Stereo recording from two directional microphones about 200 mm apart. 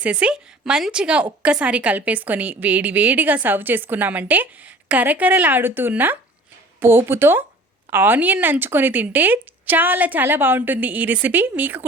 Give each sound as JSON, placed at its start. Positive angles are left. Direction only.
{"t": 0.0, "sound": "a woman's voice", "side_deg": -5}